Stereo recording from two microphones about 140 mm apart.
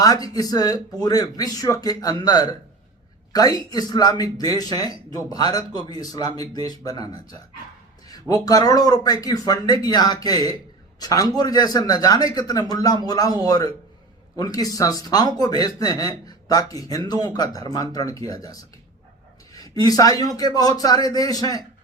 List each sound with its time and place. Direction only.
0.0 s speech: 25° left (ahead or behind)
19.5 s speech: 25° left (ahead or behind)